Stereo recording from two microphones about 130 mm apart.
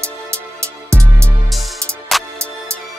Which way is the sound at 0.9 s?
10° left (ahead or behind).